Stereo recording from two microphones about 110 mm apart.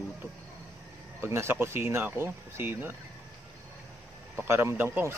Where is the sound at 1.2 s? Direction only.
20° right (ahead or behind).